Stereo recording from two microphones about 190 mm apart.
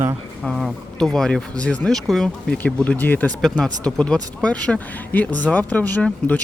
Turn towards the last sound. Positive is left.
turn(degrees=10)  # may be behind; listen again after turning